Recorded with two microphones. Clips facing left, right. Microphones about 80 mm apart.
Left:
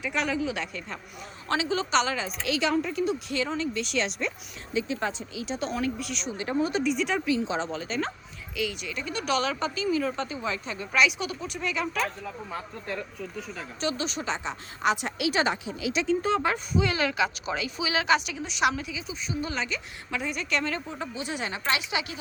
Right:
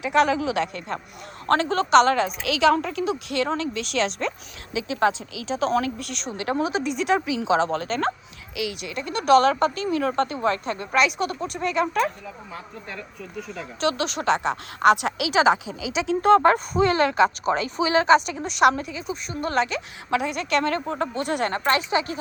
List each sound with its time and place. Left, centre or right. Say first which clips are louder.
0.0 s speech: right 8 dB; right
1.5 s a woman's voice: right 7 dB; right
6.3 s a woman's voice: right 3 dB; right
13.8 s speech: right 7 dB; right
16.0 s speech: right 10 dB; right